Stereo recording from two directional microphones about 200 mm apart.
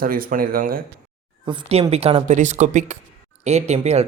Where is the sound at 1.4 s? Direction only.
25° right (ahead or behind).